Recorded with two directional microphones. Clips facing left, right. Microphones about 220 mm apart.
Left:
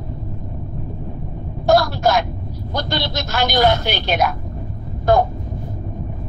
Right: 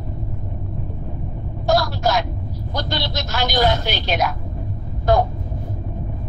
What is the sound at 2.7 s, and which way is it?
A woman's voice, 55° left (ahead or behind).